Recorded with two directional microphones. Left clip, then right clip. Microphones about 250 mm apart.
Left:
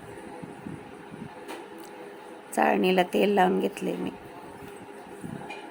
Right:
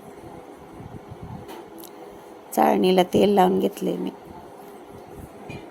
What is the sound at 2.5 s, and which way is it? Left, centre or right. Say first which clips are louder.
A woman's voice: right 4 dB; centre.